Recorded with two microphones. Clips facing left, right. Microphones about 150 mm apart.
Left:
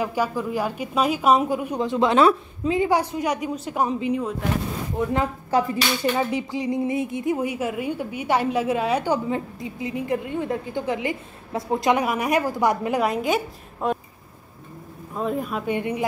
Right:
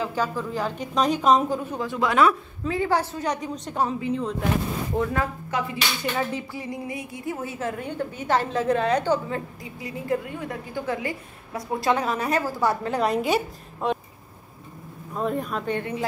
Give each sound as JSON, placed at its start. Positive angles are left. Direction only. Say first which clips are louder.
{"t": 0.0, "sound": "a woman's voice", "louder": "left 2 dB", "side_deg": 10}
{"t": 5.5, "sound": "speech", "louder": "left 7 dB", "side_deg": 35}
{"t": 6.1, "sound": "a woman's voice", "louder": "left 4 dB", "side_deg": 15}
{"t": 15.1, "sound": "a woman's voice", "louder": "left 1 dB", "side_deg": 0}